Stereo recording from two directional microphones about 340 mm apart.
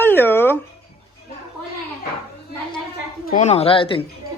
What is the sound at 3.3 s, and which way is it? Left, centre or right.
Speech, centre.